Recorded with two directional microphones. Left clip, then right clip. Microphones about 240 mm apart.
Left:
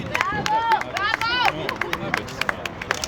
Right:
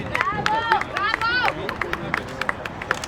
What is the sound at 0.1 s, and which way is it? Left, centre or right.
Run, left.